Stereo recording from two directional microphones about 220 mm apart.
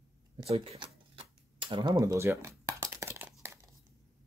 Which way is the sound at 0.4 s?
25° right (ahead or behind).